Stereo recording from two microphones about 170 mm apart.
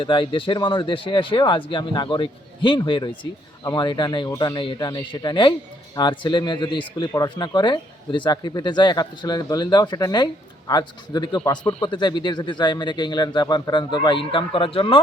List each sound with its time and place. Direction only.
0.0 s speech: 30° left (ahead or behind)